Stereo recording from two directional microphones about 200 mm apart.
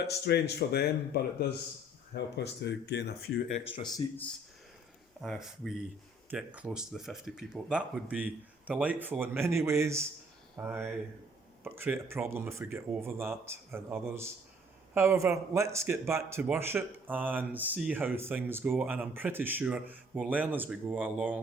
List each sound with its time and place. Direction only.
0.1 s speech: 55° left (ahead or behind)
3.8 s speech: 20° left (ahead or behind)
5.2 s a man's voice: centre (ahead or behind)